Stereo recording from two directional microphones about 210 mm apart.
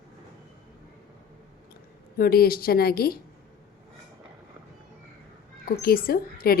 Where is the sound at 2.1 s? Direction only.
45° left (ahead or behind).